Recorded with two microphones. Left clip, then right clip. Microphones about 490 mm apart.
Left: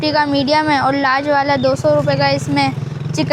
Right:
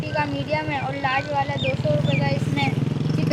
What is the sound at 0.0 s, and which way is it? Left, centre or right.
Speech, left.